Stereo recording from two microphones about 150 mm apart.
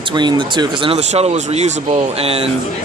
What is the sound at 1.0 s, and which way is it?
Speech, 45° right (ahead or behind).